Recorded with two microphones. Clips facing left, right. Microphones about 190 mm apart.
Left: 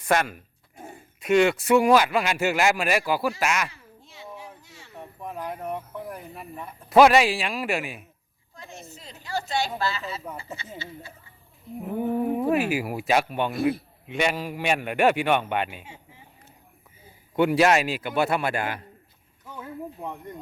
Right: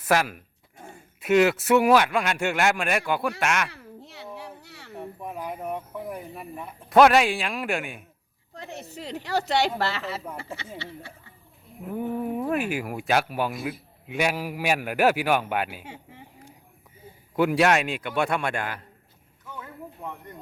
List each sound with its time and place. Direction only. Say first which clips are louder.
0.0 s speech: even; 5° right (ahead or behind)
3.7 s a sound: right 7 dB; 70° right (ahead or behind)
5.2 s speech: left 1 dB; 5° right (ahead or behind)
8.5 s speech: right 5 dB; 65° right (ahead or behind)
12.4 s speech: left 3 dB; 5° left (ahead or behind)
13.5 s a man's voice: left 8 dB; 65° left (ahead or behind)
14.1 s speech: even; 5° right (ahead or behind)
15.8 s speech: right 4 dB; 65° right (ahead or behind)
17.3 s speech: left 1 dB; centre (ahead or behind)
19.5 s a sound: left 5 dB; 15° left (ahead or behind)